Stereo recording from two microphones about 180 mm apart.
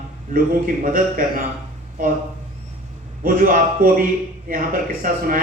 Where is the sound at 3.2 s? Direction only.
50° right (ahead or behind).